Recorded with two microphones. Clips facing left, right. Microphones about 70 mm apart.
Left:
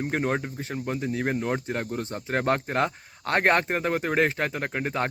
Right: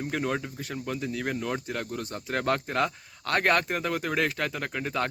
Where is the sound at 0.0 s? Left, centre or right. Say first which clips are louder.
Left 3 dB; left.